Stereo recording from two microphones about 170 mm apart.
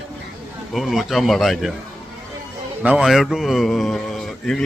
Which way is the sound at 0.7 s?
Centre (ahead or behind).